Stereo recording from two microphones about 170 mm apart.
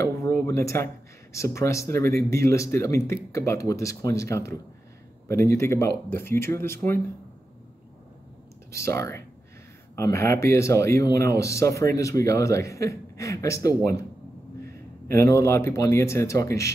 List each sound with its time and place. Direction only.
0.4 s speech: 15° left (ahead or behind)
8.7 s speech: 15° left (ahead or behind)
15.0 s speech: 15° left (ahead or behind)